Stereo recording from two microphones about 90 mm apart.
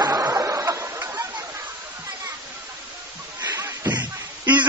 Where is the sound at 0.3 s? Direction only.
35° right (ahead or behind).